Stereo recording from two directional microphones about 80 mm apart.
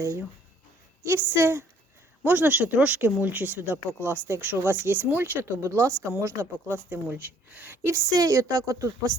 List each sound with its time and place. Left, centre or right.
0.0 s a woman's voice: right
7.9 s a woman's voice: right